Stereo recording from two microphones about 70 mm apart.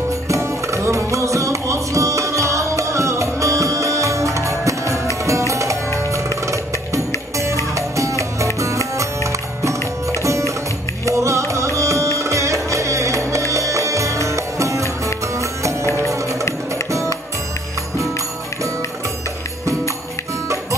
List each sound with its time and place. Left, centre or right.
0.3 s music: right